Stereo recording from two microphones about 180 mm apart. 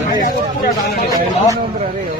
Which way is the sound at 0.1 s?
50° left (ahead or behind).